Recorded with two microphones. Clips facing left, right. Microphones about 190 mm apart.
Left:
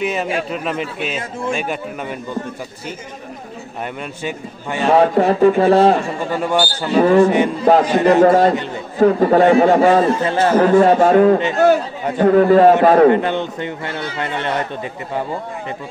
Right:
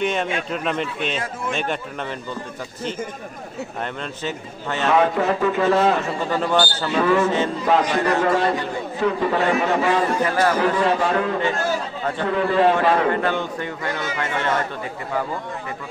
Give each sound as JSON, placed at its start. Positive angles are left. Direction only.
{"t": 0.0, "sound": "a man's voice", "side_deg": 5}
{"t": 4.2, "sound": "a man's voice", "side_deg": 10}
{"t": 4.8, "sound": "a man's voice", "side_deg": 35}
{"t": 6.3, "sound": "a man's voice", "side_deg": 10}
{"t": 6.9, "sound": "a man's voice", "side_deg": 35}
{"t": 7.2, "sound": "a man's voice", "side_deg": 15}
{"t": 8.2, "sound": "a man's voice", "side_deg": 40}
{"t": 10.2, "sound": "a man's voice", "side_deg": 25}
{"t": 10.6, "sound": "speech", "side_deg": 45}
{"t": 11.3, "sound": "a man's voice", "side_deg": 20}
{"t": 12.2, "sound": "speech", "side_deg": 45}
{"t": 13.1, "sound": "a man's voice", "side_deg": 20}